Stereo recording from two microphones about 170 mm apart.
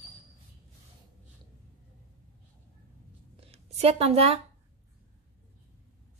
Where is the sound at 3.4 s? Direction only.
35° right (ahead or behind).